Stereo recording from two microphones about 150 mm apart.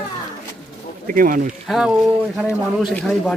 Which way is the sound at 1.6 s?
5° right (ahead or behind).